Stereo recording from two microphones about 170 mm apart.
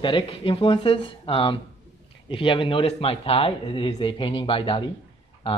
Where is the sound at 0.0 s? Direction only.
30° left (ahead or behind).